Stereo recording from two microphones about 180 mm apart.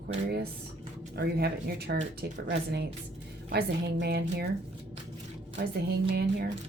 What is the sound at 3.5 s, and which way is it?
Speech, 65° right (ahead or behind).